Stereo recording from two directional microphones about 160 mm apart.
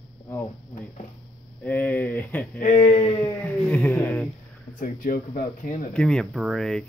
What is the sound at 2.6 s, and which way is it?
Speech, 50° left (ahead or behind).